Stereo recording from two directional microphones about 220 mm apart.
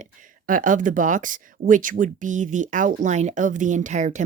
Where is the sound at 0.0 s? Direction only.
35° right (ahead or behind).